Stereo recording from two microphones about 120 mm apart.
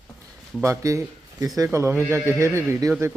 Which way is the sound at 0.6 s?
25° right (ahead or behind).